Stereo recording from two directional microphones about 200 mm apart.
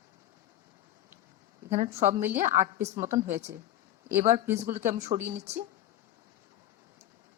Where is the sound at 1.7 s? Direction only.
35° right (ahead or behind).